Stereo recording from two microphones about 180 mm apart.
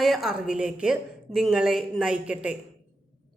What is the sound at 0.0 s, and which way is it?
A woman's voice, centre (ahead or behind).